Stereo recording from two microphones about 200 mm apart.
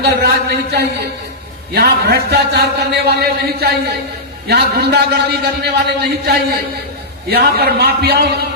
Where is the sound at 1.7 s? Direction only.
55° right (ahead or behind).